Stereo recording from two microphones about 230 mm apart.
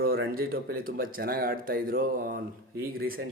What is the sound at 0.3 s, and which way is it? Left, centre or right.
Speech, right.